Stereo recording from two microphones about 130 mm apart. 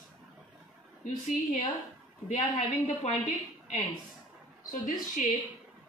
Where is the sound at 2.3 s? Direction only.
70° left (ahead or behind).